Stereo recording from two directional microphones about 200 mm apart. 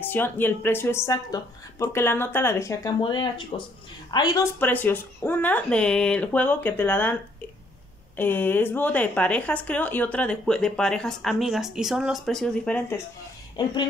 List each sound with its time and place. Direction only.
0.0 s a woman's voice: 10° left (ahead or behind)
4.6 s speech: 10° left (ahead or behind)
8.2 s speech: 10° left (ahead or behind)